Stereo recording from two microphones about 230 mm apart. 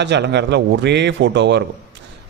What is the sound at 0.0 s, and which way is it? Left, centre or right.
Speech, right.